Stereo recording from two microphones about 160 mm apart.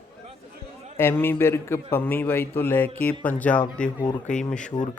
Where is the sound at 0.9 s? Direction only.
15° left (ahead or behind).